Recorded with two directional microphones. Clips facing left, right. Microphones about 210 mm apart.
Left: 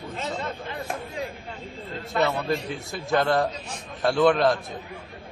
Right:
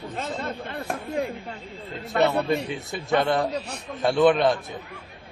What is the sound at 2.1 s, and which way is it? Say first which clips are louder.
Speech: right 3 dB; 65° right (ahead or behind).